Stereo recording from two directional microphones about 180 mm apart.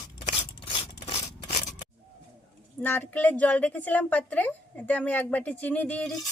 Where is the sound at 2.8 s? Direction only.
10° left (ahead or behind).